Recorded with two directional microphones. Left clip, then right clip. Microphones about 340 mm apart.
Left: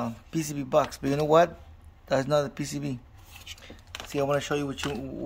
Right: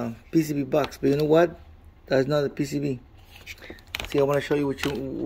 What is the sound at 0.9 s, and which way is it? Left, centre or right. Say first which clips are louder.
Speech: right 3 dB; centre.